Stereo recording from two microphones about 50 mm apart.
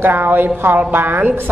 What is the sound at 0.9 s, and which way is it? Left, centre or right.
Speech, right.